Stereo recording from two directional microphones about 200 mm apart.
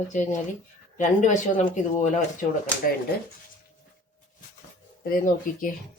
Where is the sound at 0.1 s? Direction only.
35° left (ahead or behind).